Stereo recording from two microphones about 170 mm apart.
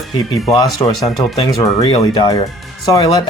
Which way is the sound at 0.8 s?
25° left (ahead or behind).